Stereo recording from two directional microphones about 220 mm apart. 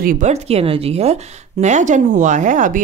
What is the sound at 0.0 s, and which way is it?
Speech, 35° right (ahead or behind).